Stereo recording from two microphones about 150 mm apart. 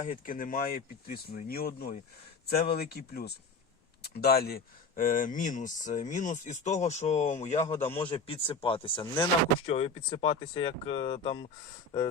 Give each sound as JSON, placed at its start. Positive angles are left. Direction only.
{"t": 0.0, "sound": "speech", "side_deg": 60}
{"t": 7.9, "sound": "a man's voice", "side_deg": 15}
{"t": 8.1, "sound": "speech", "side_deg": 40}